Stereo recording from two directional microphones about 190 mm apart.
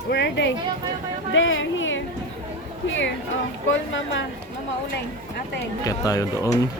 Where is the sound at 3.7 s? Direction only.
80° left.